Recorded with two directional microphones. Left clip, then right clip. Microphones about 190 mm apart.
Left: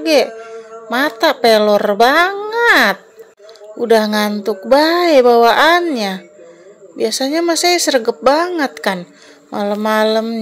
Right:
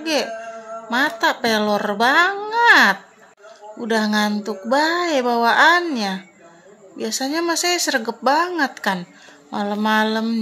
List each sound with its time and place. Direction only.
0.0 s a woman's voice: 25° left (ahead or behind)
2.4 s a sound: 25° left (ahead or behind)
3.8 s speech: 25° left (ahead or behind)